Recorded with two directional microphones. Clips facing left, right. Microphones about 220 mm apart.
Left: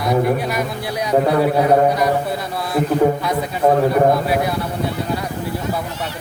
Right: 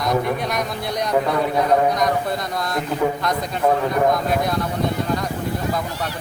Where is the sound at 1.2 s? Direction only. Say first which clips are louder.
Left 5 dB; 35° left (ahead or behind).